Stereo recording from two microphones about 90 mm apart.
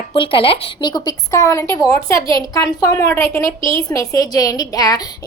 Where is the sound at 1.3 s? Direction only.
35° left (ahead or behind).